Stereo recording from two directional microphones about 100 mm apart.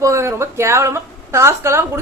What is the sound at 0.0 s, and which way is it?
A woman's voice, 30° right (ahead or behind).